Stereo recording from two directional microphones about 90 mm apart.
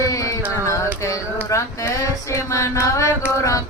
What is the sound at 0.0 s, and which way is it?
Music, 40° left (ahead or behind).